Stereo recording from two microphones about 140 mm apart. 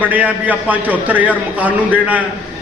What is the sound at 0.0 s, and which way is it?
A man's voice, 10° right (ahead or behind).